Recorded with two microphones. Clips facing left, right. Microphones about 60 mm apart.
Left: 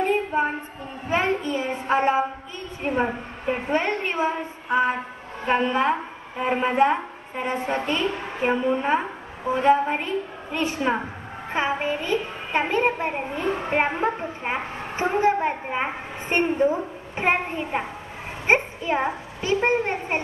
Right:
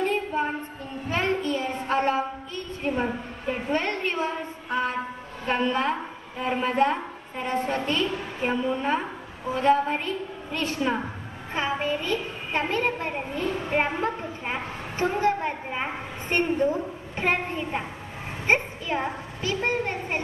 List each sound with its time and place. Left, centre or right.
0.0 s a sound: centre
1.0 s child singing: centre
5.5 s a woman's voice: centre